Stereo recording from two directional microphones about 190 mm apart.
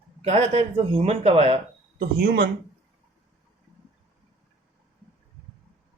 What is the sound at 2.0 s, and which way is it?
Speech, 50° right (ahead or behind).